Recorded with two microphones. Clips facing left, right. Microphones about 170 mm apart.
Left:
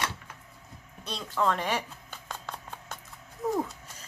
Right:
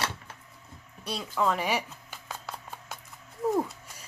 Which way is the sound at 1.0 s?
5° right (ahead or behind).